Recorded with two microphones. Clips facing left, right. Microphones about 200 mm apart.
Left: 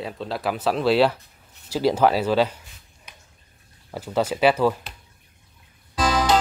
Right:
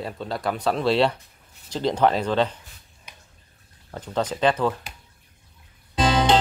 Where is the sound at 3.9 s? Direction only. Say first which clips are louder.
Left 3 dB; 10° left (ahead or behind).